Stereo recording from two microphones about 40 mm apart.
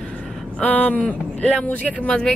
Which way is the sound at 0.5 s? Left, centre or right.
Left.